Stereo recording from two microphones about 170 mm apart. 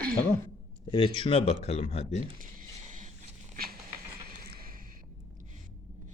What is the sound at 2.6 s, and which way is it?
Vehicle, 45° right (ahead or behind).